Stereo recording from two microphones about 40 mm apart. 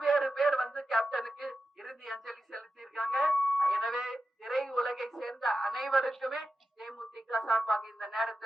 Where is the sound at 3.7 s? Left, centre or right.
Centre.